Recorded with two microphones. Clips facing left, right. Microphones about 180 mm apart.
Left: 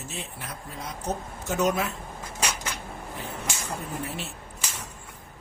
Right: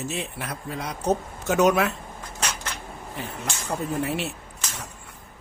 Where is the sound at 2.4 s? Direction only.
10° left (ahead or behind).